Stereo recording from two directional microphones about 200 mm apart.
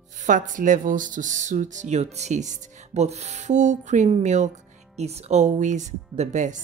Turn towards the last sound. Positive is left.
turn(degrees=-40)  # may be behind; listen again after turning